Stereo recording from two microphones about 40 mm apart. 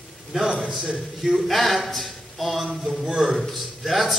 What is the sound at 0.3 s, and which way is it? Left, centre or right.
Speech, centre.